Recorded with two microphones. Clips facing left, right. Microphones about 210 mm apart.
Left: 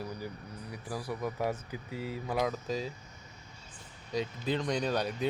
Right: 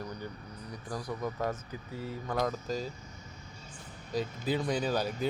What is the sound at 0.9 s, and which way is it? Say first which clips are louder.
Speech: even; 5° left (ahead or behind).